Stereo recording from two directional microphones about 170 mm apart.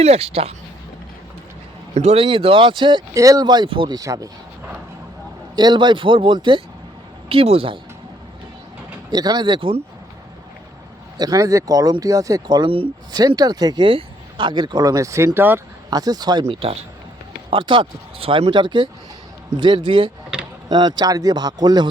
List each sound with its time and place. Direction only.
0.0 s speech: 35° right (ahead or behind)
2.0 s speech: 35° right (ahead or behind); by 4.3 s 20° right (ahead or behind)
5.5 s speech: 25° right (ahead or behind)
9.0 s speech: 25° right (ahead or behind)
11.2 s speech: 20° right (ahead or behind)
20.3 s a sound: 5° right (ahead or behind)
20.7 s speech: 25° right (ahead or behind)